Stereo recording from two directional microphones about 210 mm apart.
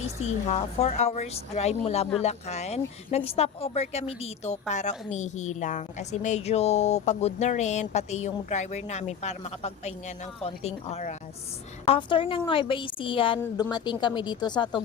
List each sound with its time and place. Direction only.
0.2 s a woman's voice: 30° left (ahead or behind)